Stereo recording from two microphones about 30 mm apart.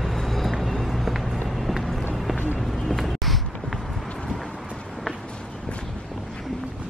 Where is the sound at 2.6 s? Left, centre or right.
Centre.